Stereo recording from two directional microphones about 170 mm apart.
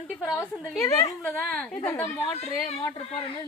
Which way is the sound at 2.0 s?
40° left (ahead or behind).